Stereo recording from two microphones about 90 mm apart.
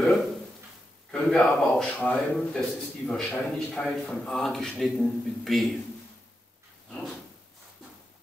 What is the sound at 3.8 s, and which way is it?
Speech, 10° left (ahead or behind).